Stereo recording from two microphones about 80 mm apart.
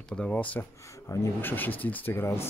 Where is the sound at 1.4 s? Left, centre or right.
Left.